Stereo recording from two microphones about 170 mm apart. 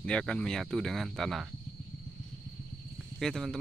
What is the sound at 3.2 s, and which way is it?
Speech, centre (ahead or behind).